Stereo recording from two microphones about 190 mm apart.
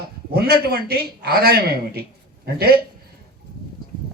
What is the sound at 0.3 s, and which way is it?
A man's voice, 55° right (ahead or behind).